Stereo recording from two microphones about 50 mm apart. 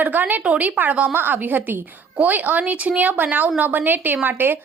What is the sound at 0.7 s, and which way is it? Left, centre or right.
A woman's voice, right.